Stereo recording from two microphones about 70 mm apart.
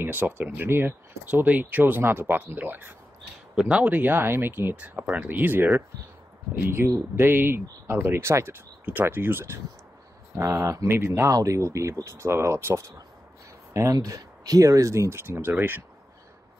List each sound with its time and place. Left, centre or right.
0.0 s speech: right
3.5 s speech: centre
3.8 s speech: right
10.3 s speech: right
11.3 s speech: right
13.9 s speech: right